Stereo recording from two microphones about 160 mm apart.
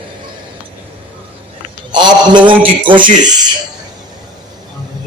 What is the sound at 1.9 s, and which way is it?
A man's voice, 30° right (ahead or behind).